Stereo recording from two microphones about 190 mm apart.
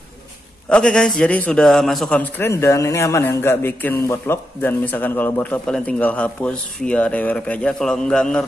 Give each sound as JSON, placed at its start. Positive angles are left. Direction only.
{"t": 0.7, "sound": "a man's voice", "side_deg": 5}